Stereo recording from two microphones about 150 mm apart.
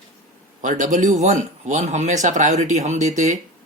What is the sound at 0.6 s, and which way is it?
Speech, 55° right (ahead or behind).